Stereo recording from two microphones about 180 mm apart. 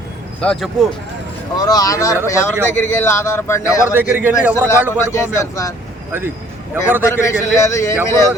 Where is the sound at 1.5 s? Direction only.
20° left (ahead or behind).